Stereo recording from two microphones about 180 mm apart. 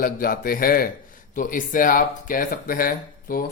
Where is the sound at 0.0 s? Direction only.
55° left (ahead or behind).